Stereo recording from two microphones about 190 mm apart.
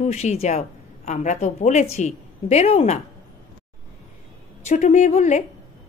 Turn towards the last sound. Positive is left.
turn(degrees=40)  # may be behind; listen again after turning